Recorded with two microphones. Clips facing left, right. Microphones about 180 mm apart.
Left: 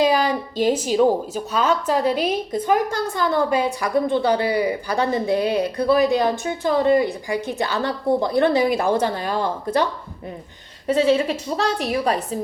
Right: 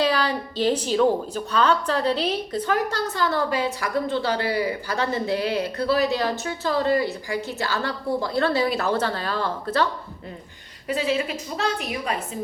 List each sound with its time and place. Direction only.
0.0 s speech: 10° left (ahead or behind)
10.8 s a woman's voice: 30° left (ahead or behind)